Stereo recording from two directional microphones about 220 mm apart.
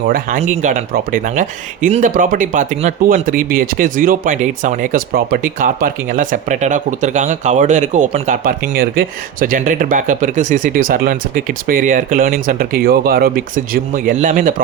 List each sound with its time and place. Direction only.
0.1 s speech: 35° right (ahead or behind)